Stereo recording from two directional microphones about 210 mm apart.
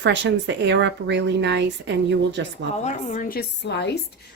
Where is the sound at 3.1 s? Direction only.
40° left (ahead or behind).